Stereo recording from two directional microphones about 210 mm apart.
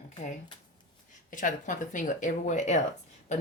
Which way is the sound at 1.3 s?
40° left (ahead or behind).